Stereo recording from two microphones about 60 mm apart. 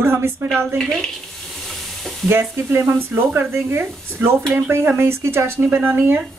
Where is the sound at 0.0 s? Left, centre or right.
Right.